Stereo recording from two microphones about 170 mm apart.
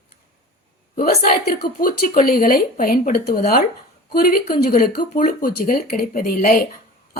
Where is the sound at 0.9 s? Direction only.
55° left (ahead or behind).